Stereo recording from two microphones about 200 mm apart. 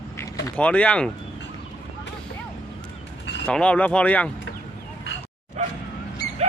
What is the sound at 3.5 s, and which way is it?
Speech, 5° left (ahead or behind).